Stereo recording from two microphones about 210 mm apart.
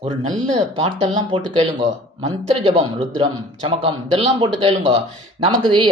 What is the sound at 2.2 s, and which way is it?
Speech, 25° right (ahead or behind).